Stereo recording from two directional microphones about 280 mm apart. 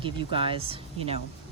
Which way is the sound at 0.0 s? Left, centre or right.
Centre.